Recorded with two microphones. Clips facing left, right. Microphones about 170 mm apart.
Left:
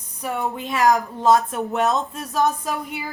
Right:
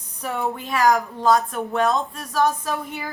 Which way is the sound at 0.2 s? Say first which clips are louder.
Even; 15° left (ahead or behind).